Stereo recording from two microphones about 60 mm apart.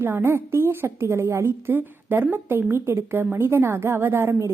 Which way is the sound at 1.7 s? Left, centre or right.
Right.